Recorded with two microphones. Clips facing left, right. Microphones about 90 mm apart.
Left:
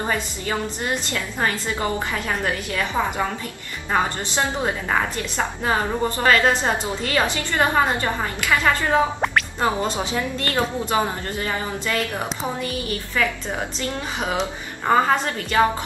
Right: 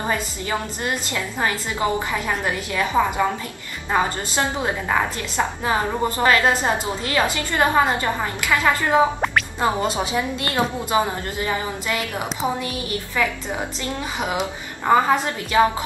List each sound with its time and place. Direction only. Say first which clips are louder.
1.4 s a woman's voice: right 1 dB; 15° right (ahead or behind)
9.2 s speech: even; centre (ahead or behind)
9.9 s a woman's voice: right 1 dB; 15° right (ahead or behind)
13.8 s a woman's voice: even; 10° right (ahead or behind)